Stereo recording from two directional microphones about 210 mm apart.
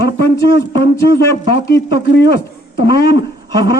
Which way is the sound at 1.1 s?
50° left (ahead or behind).